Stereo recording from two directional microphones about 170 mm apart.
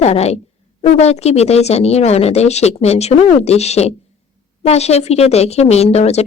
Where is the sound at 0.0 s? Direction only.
40° left (ahead or behind).